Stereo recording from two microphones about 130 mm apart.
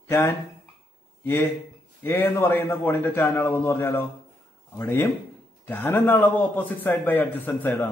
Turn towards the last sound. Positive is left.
turn(degrees=15)  # may be behind; listen again after turning